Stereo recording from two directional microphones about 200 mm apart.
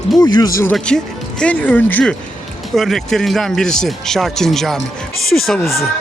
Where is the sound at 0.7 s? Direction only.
5° left (ahead or behind).